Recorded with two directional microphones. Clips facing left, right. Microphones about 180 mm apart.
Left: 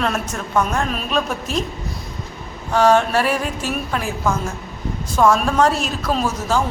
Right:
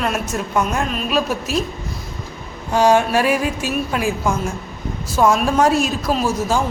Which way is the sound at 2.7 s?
10° right (ahead or behind).